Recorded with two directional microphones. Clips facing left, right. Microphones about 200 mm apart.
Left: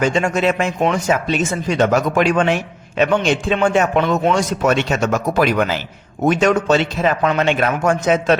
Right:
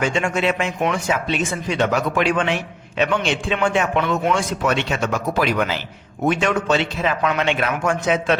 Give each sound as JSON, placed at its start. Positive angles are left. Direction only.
{"t": 0.0, "sound": "a man's voice", "side_deg": 40}